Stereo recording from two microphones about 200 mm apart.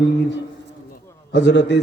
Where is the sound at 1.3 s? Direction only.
60° left (ahead or behind).